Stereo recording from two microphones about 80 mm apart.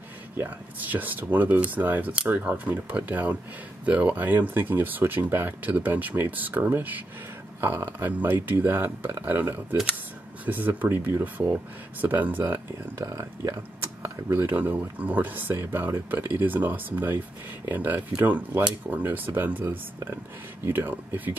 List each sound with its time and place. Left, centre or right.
0.4 s speech: right
13.0 s speech: right
13.6 s speech: right